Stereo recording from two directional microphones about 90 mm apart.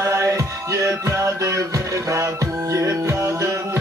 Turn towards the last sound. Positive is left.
turn(degrees=-35)  # may be behind; listen again after turning